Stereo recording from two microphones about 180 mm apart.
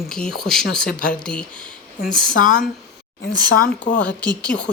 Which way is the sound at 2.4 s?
50° left (ahead or behind).